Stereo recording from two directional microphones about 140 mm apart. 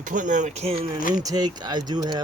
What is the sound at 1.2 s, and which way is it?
Speech, 30° right (ahead or behind).